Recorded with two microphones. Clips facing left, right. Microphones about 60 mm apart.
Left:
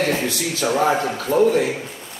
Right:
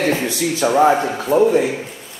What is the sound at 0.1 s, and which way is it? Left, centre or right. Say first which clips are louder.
A man's voice: right 3 dB; centre.